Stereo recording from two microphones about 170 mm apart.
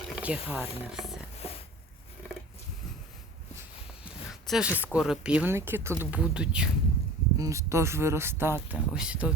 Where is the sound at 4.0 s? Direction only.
5° right (ahead or behind).